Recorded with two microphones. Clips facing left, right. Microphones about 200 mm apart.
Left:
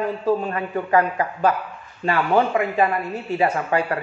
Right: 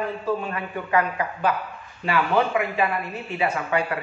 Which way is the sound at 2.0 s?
40° left (ahead or behind).